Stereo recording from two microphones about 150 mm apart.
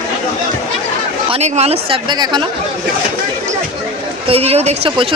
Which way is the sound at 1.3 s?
45° right (ahead or behind).